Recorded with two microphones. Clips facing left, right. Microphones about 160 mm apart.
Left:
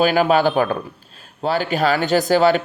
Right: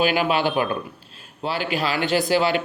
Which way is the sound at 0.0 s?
40° left (ahead or behind).